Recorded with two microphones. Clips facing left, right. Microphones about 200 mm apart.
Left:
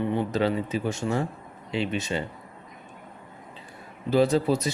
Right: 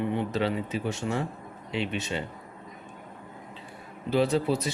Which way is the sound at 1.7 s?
35° left (ahead or behind).